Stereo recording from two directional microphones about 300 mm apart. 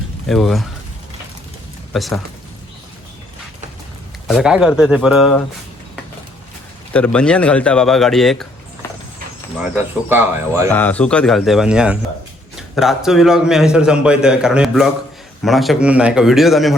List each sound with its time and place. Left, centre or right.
0.3 s a man's voice: centre
1.9 s speech: centre
4.3 s a man's voice: centre
6.9 s a man's voice: centre
9.6 s speech: centre
10.7 s a man's voice: centre